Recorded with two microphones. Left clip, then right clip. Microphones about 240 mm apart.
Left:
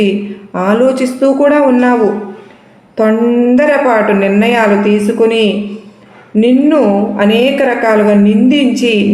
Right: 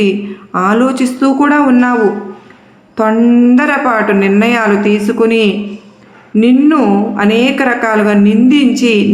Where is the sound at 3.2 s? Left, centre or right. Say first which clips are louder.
Left 1 dB; right.